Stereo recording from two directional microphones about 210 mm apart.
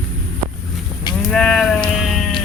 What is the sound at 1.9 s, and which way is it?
Music, centre (ahead or behind).